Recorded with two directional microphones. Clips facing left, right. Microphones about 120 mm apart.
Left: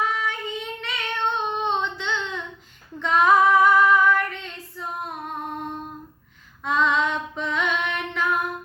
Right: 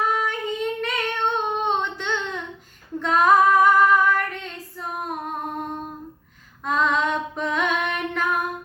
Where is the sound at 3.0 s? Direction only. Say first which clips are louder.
Right 1 dB; 45° right (ahead or behind).